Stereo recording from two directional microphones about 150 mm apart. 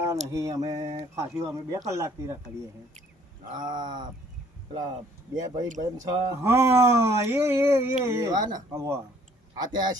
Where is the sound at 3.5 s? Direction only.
30° right (ahead or behind).